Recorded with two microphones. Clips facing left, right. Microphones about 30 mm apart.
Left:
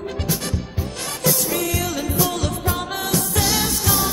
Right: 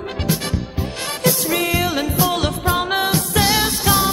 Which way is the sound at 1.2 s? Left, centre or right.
Right.